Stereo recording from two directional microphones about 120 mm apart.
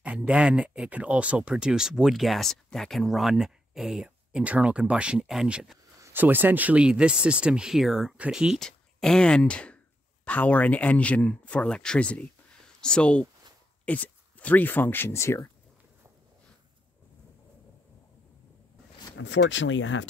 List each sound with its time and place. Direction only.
0.0 s speech: 10° right (ahead or behind)
6.1 s speech: 15° right (ahead or behind); by 15.5 s 25° left (ahead or behind)